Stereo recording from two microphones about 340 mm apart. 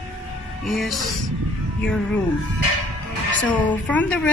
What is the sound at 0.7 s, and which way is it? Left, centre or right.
Speech, centre.